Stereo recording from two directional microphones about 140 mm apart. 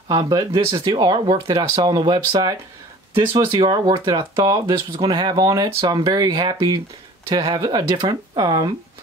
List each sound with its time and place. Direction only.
0.1 s speech: 30° right (ahead or behind)